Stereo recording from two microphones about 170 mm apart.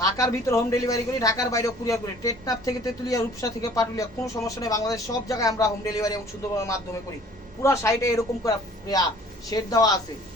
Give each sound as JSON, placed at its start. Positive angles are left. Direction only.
{"t": 0.0, "sound": "a man's voice", "side_deg": 20}